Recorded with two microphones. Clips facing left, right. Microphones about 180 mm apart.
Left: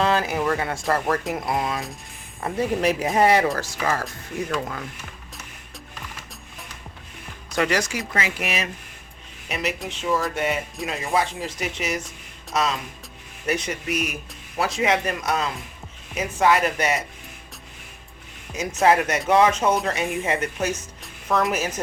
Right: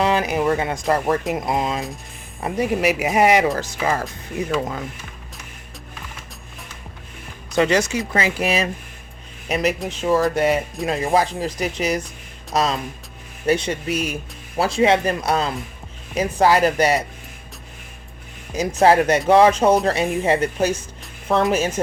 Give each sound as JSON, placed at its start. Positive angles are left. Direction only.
{"t": 0.0, "sound": "speech", "side_deg": -15}
{"t": 5.9, "sound": "music", "side_deg": 0}
{"t": 7.5, "sound": "speech", "side_deg": -25}
{"t": 18.5, "sound": "speech", "side_deg": -35}